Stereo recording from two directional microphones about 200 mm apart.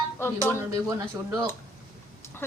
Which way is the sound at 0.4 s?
15° right (ahead or behind).